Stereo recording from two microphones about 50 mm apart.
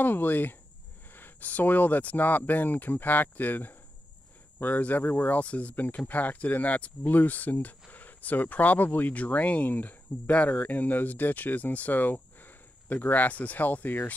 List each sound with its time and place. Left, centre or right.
0.0 s speech: left
5.4 s speech: left